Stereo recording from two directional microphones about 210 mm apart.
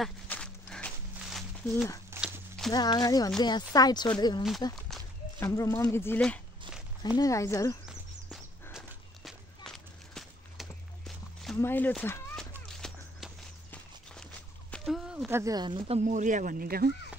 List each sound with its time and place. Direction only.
0.0 s walk: 5° left (ahead or behind)
2.0 s a sound: 10° right (ahead or behind)
2.7 s speech: 20° left (ahead or behind)
8.7 s walk: centre (ahead or behind)
15.2 s speech: 15° right (ahead or behind)
16.0 s speech: 35° right (ahead or behind)